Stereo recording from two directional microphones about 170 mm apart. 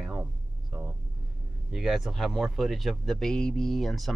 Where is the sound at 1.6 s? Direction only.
Centre (ahead or behind).